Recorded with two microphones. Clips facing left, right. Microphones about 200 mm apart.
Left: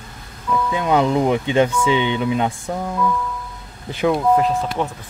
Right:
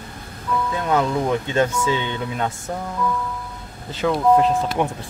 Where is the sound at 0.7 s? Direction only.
15° left (ahead or behind).